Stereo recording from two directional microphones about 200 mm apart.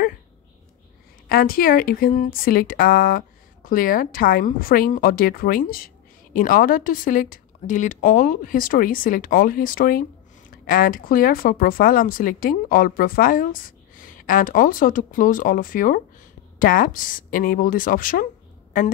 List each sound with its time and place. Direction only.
1.3 s speech: 45° left (ahead or behind)